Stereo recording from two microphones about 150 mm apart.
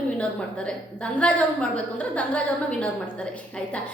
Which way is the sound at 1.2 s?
10° left (ahead or behind).